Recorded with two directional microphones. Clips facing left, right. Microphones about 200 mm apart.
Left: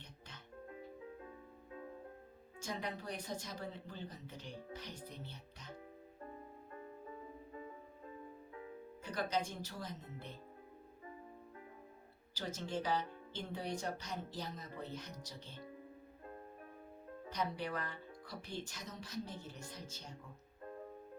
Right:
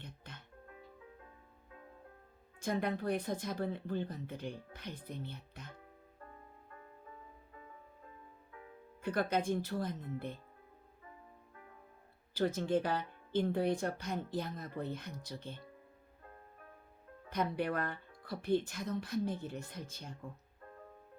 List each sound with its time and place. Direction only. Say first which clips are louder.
0.0 s music: right 5 dB; 55° right (ahead or behind)
2.6 s speech: right 8 dB; 55° right (ahead or behind)
9.0 s speech: right 6 dB; 55° right (ahead or behind)
12.3 s speech: right 10 dB; 55° right (ahead or behind)
17.2 s speech: right 6 dB; 55° right (ahead or behind)